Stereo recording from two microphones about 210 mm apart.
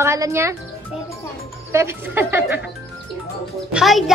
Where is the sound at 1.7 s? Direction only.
10° right (ahead or behind).